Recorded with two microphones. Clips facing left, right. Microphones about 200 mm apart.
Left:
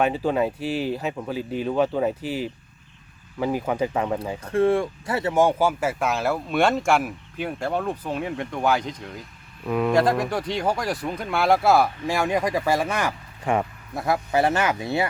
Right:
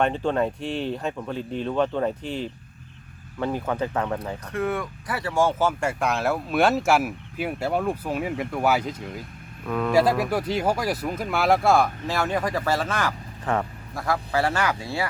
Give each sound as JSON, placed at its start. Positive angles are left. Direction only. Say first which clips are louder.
{"t": 0.0, "sound": "speech", "louder": "left 1 dB", "side_deg": 5}
{"t": 4.4, "sound": "speech", "louder": "left 8 dB", "side_deg": 30}
{"t": 9.6, "sound": "speech", "louder": "left 3 dB", "side_deg": 10}
{"t": 9.9, "sound": "speech", "louder": "right 2 dB", "side_deg": -5}
{"t": 12.0, "sound": "speech", "louder": "left 2 dB", "side_deg": 15}